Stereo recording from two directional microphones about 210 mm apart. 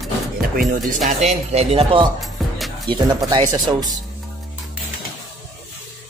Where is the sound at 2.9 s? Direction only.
20° right (ahead or behind).